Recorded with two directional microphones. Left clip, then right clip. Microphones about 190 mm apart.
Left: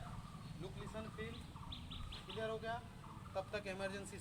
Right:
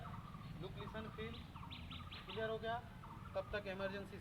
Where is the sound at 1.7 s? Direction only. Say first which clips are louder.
Left 2 dB; 75° left (ahead or behind).